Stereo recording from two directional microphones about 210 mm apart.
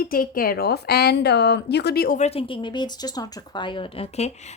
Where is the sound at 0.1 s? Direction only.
45° left (ahead or behind).